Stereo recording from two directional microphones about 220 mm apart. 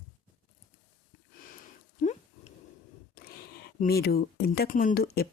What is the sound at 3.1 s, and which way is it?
Speech, 40° left (ahead or behind).